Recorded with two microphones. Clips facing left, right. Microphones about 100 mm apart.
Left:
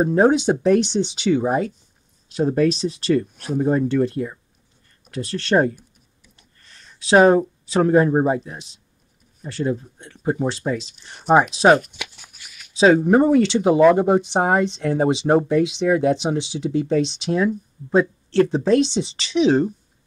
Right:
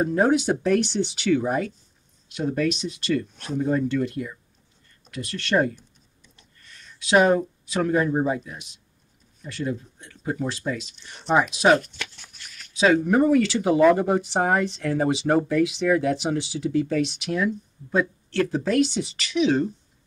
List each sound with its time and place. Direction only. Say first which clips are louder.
0.0 s speech: left 4 dB; 25° left (ahead or behind)
11.9 s a sound: left 1 dB; 15° left (ahead or behind)
12.7 s speech: left 5 dB; 30° left (ahead or behind)